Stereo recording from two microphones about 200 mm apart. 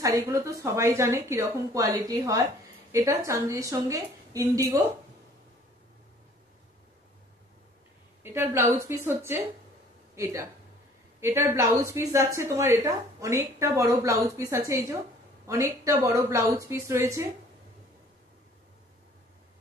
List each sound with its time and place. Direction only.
0.0 s a woman's voice: 15° right (ahead or behind)
8.2 s a woman's voice: 10° right (ahead or behind)